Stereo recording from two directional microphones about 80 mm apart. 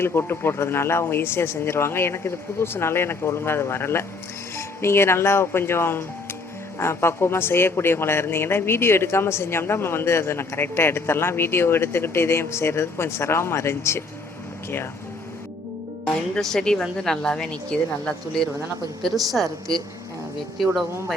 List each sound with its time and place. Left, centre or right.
0.0 s speech: left
16.0 s a woman's voice: centre
19.0 s a woman's voice: centre